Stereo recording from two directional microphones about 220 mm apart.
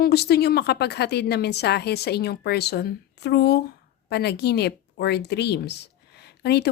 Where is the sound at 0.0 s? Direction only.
45° left (ahead or behind).